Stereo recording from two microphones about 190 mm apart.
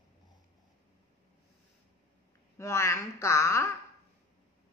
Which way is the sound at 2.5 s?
15° left (ahead or behind).